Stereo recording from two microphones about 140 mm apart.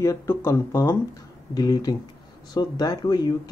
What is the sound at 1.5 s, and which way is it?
Speech, 30° left (ahead or behind).